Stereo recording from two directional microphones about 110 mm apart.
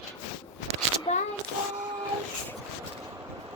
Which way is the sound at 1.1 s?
70° left (ahead or behind).